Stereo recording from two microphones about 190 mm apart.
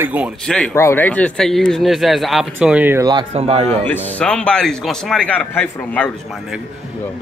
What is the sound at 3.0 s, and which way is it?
Speech, 30° right (ahead or behind).